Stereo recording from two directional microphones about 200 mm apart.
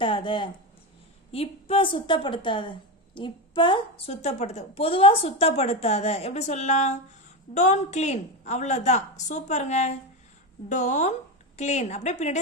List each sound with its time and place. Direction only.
0.0 s a woman's voice: 25° left (ahead or behind)